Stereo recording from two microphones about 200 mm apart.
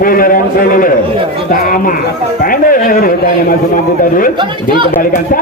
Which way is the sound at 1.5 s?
45° left (ahead or behind).